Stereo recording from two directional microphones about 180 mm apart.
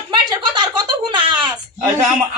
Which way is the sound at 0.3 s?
25° right (ahead or behind).